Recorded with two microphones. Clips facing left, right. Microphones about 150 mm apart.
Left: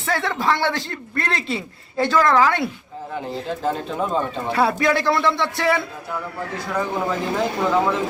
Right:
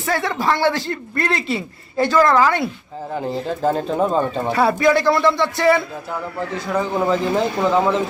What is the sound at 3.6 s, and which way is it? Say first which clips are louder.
Speech: right 6 dB; 40° right (ahead or behind).